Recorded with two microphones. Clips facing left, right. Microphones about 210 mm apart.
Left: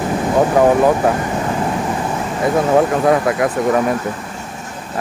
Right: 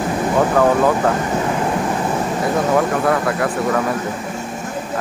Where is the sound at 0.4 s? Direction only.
15° left (ahead or behind).